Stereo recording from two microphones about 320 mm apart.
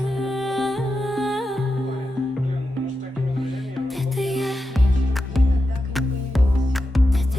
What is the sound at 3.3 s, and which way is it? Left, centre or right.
Music, centre.